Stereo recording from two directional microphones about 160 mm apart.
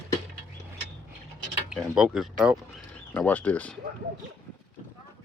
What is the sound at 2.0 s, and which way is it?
Speech, 5° right (ahead or behind).